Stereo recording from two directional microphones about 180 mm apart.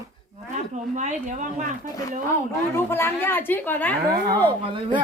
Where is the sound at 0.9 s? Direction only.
45° right (ahead or behind).